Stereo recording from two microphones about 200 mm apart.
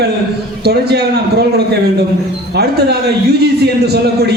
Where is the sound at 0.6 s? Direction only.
55° right (ahead or behind).